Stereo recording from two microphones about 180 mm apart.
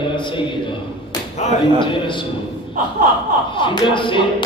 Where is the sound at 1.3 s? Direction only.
35° left (ahead or behind).